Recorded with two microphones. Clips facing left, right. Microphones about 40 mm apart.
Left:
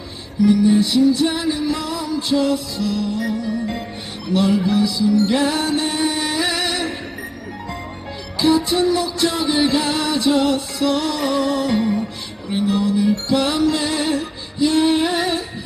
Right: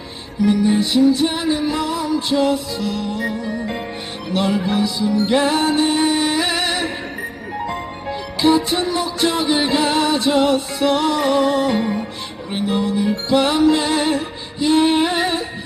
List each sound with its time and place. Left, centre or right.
0.4 s music: right
8.0 s music: right